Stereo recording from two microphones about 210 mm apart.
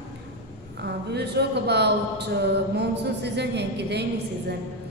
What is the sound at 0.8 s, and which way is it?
Speech, 50° right (ahead or behind).